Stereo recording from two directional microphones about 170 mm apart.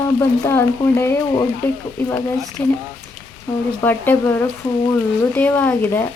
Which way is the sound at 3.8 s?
10° left (ahead or behind).